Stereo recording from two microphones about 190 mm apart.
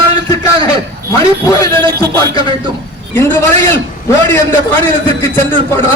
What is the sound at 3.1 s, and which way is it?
A man's voice, 10° left (ahead or behind).